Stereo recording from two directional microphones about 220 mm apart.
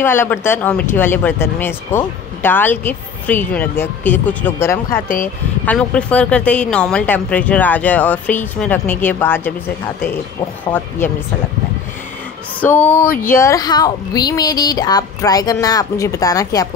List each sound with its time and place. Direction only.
0.0 s speech: 10° left (ahead or behind)
5.0 s speech: 40° left (ahead or behind)
5.7 s speech: 5° left (ahead or behind)
10.6 s speech: 10° left (ahead or behind)
12.5 s speech: 10° left (ahead or behind)